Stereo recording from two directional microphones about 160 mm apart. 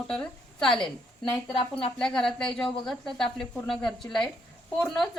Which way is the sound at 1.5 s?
35° left (ahead or behind).